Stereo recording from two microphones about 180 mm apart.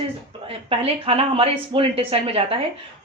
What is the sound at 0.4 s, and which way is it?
Speech, 30° right (ahead or behind).